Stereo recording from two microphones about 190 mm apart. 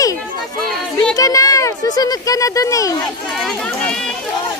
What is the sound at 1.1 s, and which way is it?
A child's voice, 20° left (ahead or behind).